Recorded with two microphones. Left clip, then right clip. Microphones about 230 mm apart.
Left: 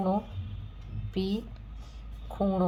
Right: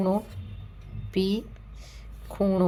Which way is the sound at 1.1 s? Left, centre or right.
Right.